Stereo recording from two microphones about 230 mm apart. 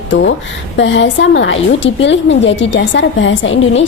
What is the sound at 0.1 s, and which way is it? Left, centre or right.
A woman's voice, left.